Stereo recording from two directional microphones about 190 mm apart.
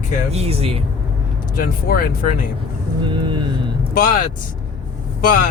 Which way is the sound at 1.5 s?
50° left (ahead or behind).